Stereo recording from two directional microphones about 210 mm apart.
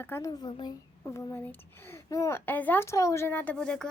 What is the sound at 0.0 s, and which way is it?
Speech, 15° left (ahead or behind).